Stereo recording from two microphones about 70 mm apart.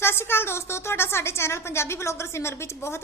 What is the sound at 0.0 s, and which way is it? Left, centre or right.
A woman's voice, left.